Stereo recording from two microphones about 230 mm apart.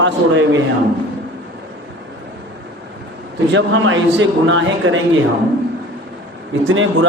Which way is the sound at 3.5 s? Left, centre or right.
Right.